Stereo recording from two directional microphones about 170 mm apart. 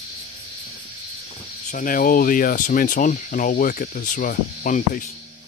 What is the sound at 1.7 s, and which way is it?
Speech, 50° left (ahead or behind).